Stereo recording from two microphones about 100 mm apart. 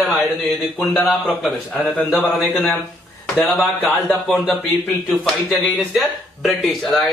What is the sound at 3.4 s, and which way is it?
Speech, centre (ahead or behind).